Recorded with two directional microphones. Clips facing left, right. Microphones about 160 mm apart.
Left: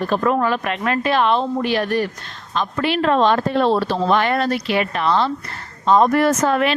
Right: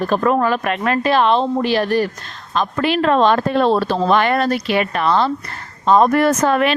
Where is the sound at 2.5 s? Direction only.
45° right (ahead or behind).